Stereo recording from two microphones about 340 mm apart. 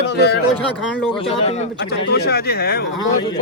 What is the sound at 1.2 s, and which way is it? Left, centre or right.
Speech, centre.